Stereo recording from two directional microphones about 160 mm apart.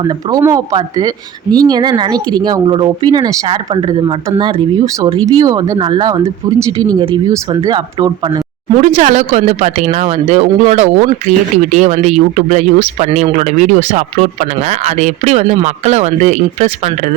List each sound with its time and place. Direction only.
0.0 s speech: 25° right (ahead or behind)
7.0 s speech: 30° right (ahead or behind)
8.8 s speech: 45° right (ahead or behind)